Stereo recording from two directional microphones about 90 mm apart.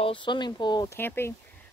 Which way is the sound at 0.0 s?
70° left (ahead or behind).